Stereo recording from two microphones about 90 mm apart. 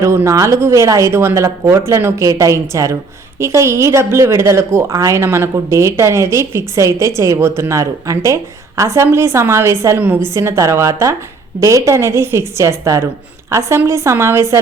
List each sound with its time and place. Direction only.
0.3 s a woman's voice: 35° right (ahead or behind)
2.2 s a woman's voice: 35° right (ahead or behind)